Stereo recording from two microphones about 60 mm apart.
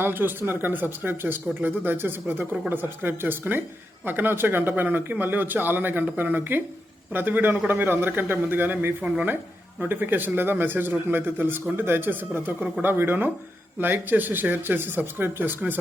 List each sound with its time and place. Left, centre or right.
0.0 s speech: right